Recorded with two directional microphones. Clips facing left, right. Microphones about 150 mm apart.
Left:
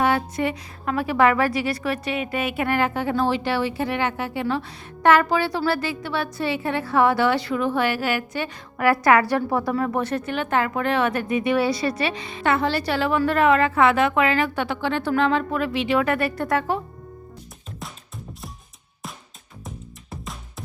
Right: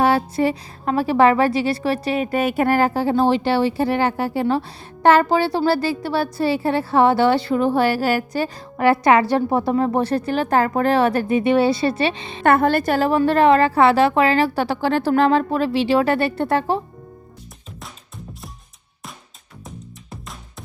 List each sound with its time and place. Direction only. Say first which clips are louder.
0.0 s a woman's voice: right 4 dB; 35° right (ahead or behind)
12.4 s a woman's voice: right 6 dB; 50° right (ahead or behind); by 16.8 s 30° right (ahead or behind)
17.7 s music: left 2 dB; centre (ahead or behind)
19.6 s music: right 1 dB; centre (ahead or behind)